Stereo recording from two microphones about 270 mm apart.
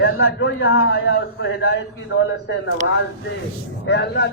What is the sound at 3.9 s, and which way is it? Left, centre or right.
Speech, left.